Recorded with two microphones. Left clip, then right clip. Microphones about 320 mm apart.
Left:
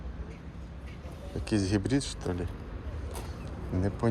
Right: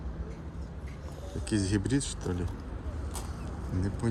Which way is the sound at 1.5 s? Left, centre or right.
Centre.